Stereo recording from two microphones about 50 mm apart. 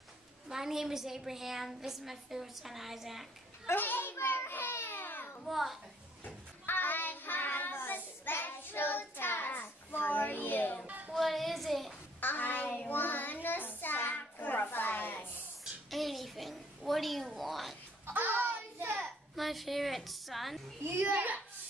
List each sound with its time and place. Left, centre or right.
0.5 s a woman's voice: centre
3.6 s a sound: left
4.7 s babbling: left
5.4 s a child's voice: centre
6.6 s child singing: left
11.1 s a sound: centre
12.2 s child singing: left
15.6 s a sound: centre
18.1 s child singing: right
19.3 s a woman's voice: centre
20.8 s a child's voice: right